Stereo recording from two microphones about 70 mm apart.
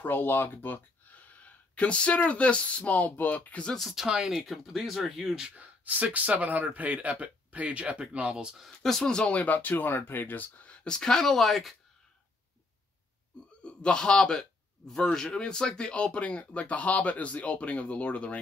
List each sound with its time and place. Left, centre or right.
0.0 s speech: left
3.7 s speech: centre
5.6 s speech: right
8.5 s speech: centre
13.7 s a man's voice: centre